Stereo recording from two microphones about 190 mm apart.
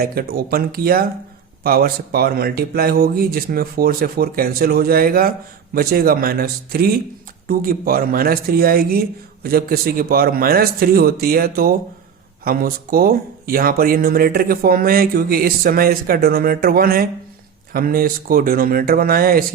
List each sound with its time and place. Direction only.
0.0 s speech: 55° right (ahead or behind)